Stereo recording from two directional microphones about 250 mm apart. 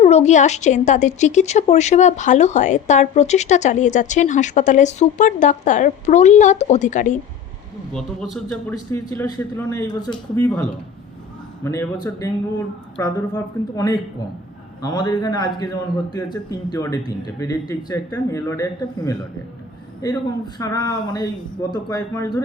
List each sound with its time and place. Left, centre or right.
0.0 s speech: left
7.9 s a man's voice: centre
8.7 s a man's voice: centre
11.6 s a man's voice: centre